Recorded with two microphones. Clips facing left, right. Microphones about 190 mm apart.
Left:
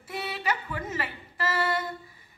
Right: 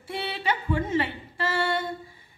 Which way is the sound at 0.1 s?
30° right (ahead or behind).